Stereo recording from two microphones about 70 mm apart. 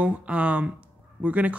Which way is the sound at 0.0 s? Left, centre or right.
Centre.